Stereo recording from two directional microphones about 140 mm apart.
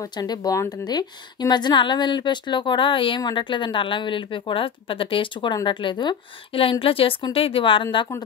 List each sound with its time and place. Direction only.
0.0 s speech: 30° left (ahead or behind)